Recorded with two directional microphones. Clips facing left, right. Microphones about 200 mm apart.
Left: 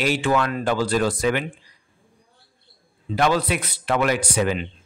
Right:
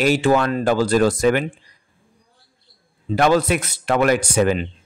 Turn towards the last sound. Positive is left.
turn(degrees=-45)  # may be behind; listen again after turning